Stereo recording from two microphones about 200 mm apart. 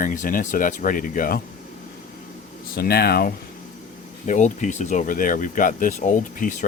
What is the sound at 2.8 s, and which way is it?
Speech, 55° left (ahead or behind).